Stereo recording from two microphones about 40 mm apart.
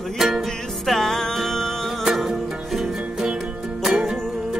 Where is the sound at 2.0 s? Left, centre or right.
Centre.